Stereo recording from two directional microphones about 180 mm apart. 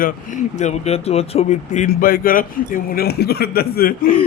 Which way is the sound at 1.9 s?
55° left (ahead or behind).